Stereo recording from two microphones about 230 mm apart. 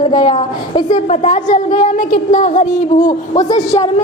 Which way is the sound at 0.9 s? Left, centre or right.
Left.